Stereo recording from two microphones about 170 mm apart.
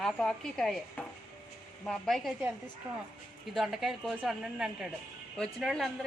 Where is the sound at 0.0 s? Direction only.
5° left (ahead or behind).